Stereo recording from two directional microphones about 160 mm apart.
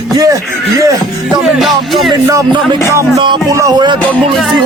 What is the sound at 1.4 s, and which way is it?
Music, centre (ahead or behind).